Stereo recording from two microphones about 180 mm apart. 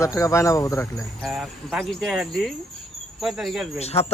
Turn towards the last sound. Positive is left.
turn(degrees=35)  # may be behind; listen again after turning